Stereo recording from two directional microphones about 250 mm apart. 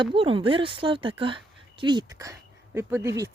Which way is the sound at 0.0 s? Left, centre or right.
Right.